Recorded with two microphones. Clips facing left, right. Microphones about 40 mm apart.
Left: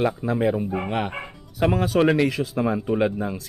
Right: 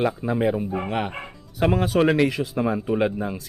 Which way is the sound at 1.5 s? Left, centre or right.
Centre.